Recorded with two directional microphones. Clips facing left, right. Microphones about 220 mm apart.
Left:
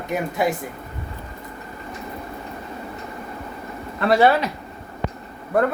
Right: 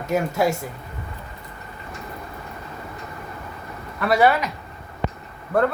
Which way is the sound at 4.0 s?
25° left (ahead or behind).